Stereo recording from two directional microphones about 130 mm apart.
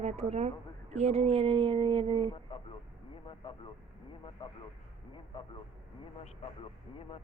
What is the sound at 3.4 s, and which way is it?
Vehicle, 40° left (ahead or behind).